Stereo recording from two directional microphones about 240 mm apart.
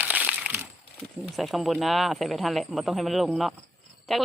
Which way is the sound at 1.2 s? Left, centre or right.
Centre.